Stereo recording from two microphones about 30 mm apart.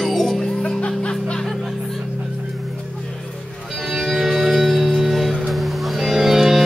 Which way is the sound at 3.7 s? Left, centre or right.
Centre.